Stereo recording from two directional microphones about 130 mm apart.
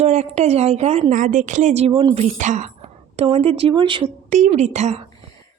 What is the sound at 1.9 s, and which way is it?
Speech, 40° right (ahead or behind).